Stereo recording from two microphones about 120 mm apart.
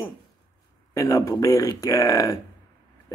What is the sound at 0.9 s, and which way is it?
A man's voice, 30° left (ahead or behind).